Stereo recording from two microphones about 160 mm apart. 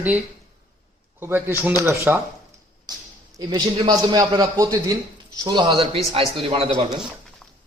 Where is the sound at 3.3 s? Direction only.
25° right (ahead or behind).